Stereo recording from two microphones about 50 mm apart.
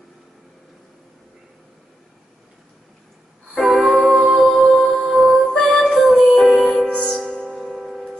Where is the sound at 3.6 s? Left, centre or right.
Centre.